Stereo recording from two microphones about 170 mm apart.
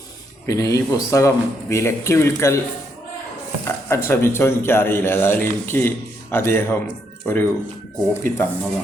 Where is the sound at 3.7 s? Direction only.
15° left (ahead or behind).